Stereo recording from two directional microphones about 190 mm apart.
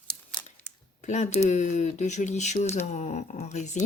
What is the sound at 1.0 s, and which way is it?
Speech, 40° left (ahead or behind).